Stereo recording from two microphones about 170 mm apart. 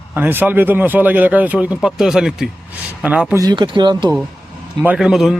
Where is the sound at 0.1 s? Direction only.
10° right (ahead or behind).